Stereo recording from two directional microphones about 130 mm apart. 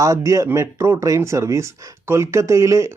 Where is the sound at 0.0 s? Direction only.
25° right (ahead or behind).